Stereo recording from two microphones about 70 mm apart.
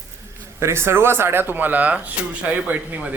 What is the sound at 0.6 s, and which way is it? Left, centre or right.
Speech, right.